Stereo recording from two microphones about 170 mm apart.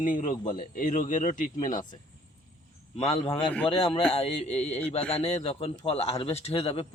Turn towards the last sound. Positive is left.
turn(degrees=35)  # may be behind; listen again after turning